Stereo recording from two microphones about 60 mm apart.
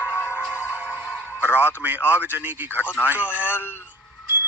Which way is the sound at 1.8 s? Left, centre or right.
Right.